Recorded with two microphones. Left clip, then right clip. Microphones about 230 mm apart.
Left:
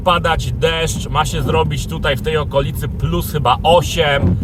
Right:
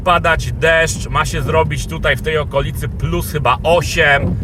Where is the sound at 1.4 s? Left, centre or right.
Centre.